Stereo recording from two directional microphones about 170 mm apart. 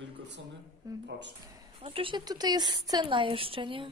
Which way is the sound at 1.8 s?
30° right (ahead or behind).